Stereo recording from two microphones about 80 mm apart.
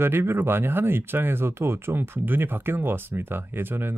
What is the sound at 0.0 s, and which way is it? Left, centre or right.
Speech, right.